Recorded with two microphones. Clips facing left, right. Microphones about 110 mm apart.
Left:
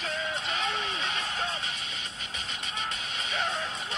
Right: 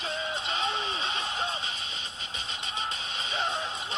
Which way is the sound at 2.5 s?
30° right (ahead or behind).